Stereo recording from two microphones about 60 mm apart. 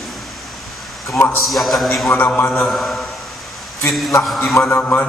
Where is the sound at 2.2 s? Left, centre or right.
Left.